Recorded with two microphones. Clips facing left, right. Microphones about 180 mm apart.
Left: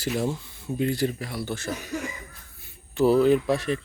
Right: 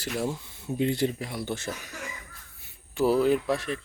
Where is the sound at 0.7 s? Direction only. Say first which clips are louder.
Left 1 dB; 20° right (ahead or behind).